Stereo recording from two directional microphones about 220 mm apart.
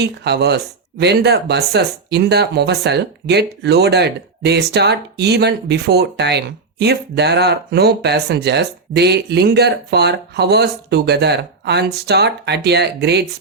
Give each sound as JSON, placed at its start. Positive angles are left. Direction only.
{"t": 0.0, "sound": "speech", "side_deg": -50}